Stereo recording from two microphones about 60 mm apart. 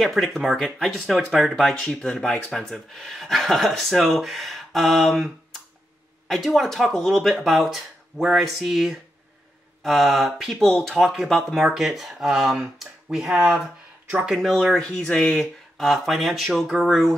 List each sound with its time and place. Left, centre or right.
0.0 s speech: centre
14.3 s speech: centre
14.8 s speech: centre